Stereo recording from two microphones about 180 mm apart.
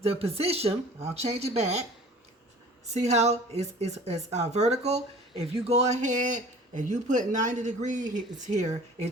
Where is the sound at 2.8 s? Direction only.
40° right (ahead or behind).